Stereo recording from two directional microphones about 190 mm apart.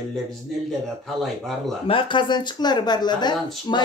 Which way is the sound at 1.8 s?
25° left (ahead or behind).